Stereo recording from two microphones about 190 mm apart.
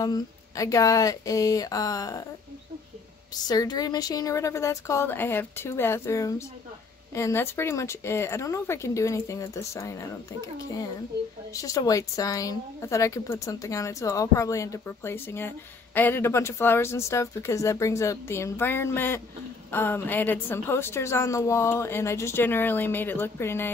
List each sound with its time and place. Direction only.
0.0 s speech: 20° left (ahead or behind)
3.4 s a woman's voice: 20° left (ahead or behind)